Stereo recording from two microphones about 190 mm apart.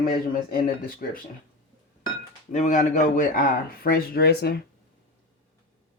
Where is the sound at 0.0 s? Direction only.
50° left (ahead or behind).